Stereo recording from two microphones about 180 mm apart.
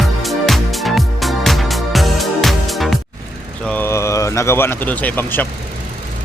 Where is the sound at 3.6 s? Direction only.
10° left (ahead or behind).